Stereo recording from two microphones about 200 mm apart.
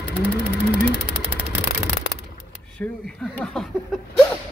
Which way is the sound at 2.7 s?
5° left (ahead or behind).